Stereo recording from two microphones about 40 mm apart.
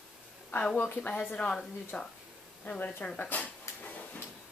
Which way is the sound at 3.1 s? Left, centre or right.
Left.